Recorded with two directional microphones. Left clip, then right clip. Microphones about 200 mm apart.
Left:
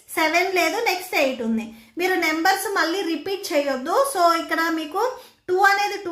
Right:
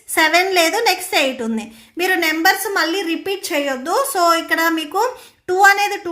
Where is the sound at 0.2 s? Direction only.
40° right (ahead or behind).